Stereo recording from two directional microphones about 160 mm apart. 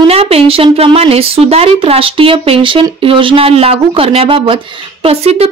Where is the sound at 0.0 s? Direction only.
40° right (ahead or behind).